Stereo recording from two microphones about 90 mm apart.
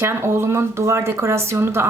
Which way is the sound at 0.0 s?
30° right (ahead or behind).